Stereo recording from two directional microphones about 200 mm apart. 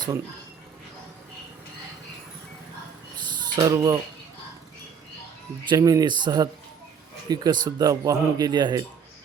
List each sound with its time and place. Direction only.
3.5 s speech: 20° right (ahead or behind)
5.6 s speech: 20° right (ahead or behind)